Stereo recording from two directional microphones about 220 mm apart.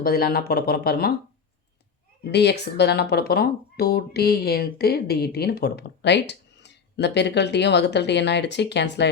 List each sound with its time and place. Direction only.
0.0 s speech: 45° left (ahead or behind)
2.3 s speech: 50° left (ahead or behind)